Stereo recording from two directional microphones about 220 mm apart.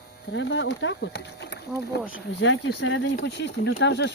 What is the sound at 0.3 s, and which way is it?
Speech, 55° left (ahead or behind).